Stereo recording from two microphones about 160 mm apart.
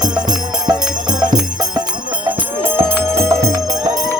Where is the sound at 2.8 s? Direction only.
15° right (ahead or behind).